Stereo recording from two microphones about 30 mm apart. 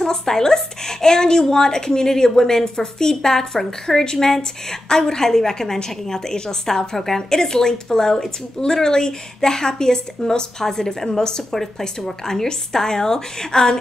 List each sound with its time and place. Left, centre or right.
0.0 s a woman's voice: centre
4.0 s a woman's voice: left